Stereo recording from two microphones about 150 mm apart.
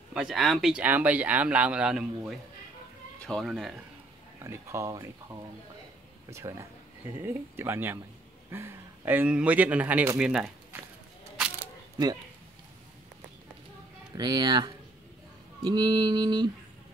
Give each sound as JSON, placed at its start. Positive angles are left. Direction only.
{"t": 0.1, "sound": "speech", "side_deg": -5}
{"t": 4.4, "sound": "mantra", "side_deg": -20}
{"t": 6.3, "sound": "mantra", "side_deg": -20}
{"t": 7.2, "sound": "speech", "side_deg": -15}
{"t": 14.1, "sound": "mantra", "side_deg": -25}